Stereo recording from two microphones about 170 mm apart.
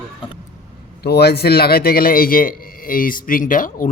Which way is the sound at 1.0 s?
70° left (ahead or behind).